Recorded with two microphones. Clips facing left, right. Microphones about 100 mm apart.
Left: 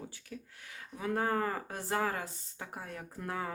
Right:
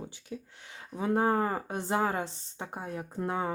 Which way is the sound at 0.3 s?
20° right (ahead or behind).